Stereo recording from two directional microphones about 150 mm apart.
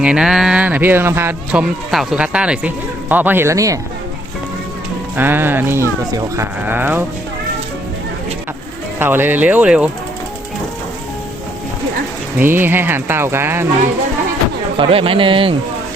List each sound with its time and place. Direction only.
0.0 s speech: 5° right (ahead or behind); by 3.8 s 20° right (ahead or behind)
5.1 s speech: 15° right (ahead or behind)
9.0 s speech: 15° right (ahead or behind)
12.4 s speech: 15° right (ahead or behind)
14.8 s speech: 40° right (ahead or behind)